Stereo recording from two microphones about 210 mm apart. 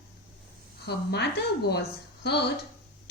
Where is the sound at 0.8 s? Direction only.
50° left (ahead or behind).